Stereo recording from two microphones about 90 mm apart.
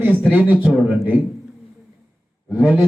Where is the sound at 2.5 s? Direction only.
20° right (ahead or behind).